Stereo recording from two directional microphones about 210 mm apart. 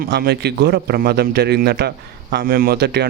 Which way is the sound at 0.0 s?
50° right (ahead or behind).